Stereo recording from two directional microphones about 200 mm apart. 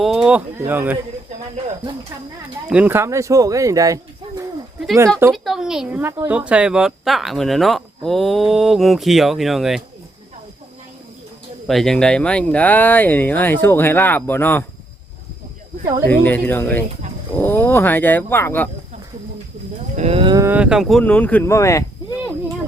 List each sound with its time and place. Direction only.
0.0 s a woman's voice: centre (ahead or behind)
2.6 s speech: 5° right (ahead or behind)
5.3 s a woman's voice: centre (ahead or behind)
11.7 s speech: centre (ahead or behind)
16.0 s speech: 10° left (ahead or behind)
20.0 s moo: 30° right (ahead or behind)
20.5 s speech: 5° right (ahead or behind); by 21.8 s 15° left (ahead or behind)